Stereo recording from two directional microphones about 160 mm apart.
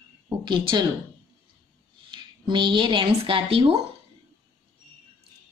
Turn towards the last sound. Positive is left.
turn(degrees=-35)  # may be behind; listen again after turning